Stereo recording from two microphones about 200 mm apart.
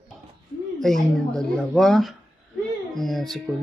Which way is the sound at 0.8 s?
Centre (ahead or behind).